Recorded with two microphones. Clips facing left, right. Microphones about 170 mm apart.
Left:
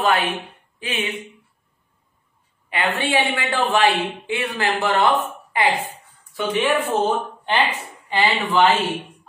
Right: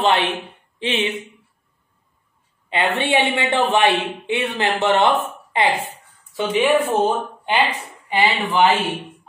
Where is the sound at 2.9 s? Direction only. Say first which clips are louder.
Right 2 dB; 25° right (ahead or behind).